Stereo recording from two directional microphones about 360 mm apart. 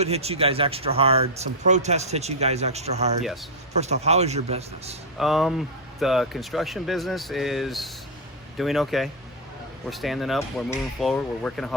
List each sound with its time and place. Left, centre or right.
0.0 s speech: centre
5.2 s speech: centre